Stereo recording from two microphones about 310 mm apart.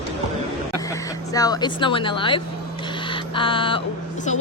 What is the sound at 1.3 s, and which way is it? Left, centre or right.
Speech, centre.